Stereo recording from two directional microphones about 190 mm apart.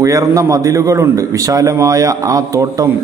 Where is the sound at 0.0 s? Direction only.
15° right (ahead or behind).